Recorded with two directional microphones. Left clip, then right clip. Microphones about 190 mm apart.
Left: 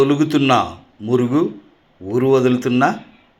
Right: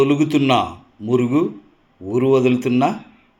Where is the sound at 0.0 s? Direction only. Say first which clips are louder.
Left 1 dB; 10° right (ahead or behind).